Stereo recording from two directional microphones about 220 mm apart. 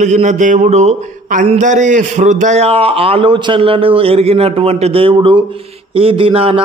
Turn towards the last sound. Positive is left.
turn(degrees=-25)  # may be behind; listen again after turning